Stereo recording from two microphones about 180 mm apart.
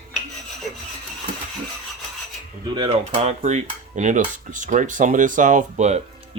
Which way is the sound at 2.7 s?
35° right (ahead or behind).